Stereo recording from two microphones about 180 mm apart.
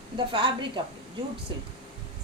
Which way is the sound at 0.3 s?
25° right (ahead or behind).